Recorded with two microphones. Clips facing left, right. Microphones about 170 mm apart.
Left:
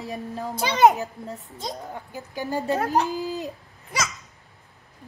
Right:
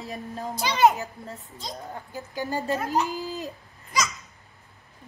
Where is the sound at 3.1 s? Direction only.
15° left (ahead or behind).